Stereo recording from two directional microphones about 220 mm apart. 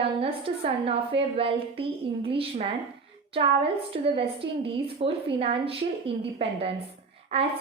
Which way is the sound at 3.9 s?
25° right (ahead or behind).